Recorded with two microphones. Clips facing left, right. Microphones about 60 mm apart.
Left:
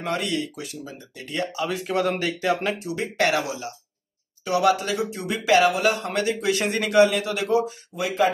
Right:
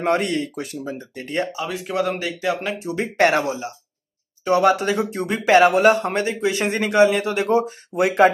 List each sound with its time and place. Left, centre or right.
0.0 s speech: right
1.5 s speech: centre
2.9 s speech: right
6.4 s speech: right